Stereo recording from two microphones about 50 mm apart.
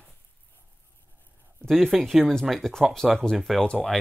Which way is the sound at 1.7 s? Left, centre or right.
Centre.